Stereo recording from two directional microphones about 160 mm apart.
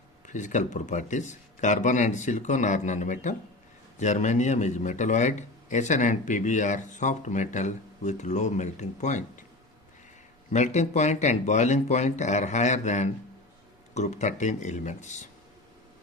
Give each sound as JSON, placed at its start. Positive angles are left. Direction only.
{"t": 0.3, "sound": "a man's voice", "side_deg": 50}
{"t": 10.5, "sound": "a man's voice", "side_deg": 45}